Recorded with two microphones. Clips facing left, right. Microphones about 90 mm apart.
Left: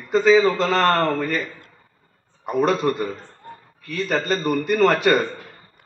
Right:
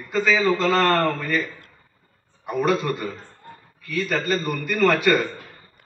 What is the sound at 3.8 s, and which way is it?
A man's voice, 25° left (ahead or behind).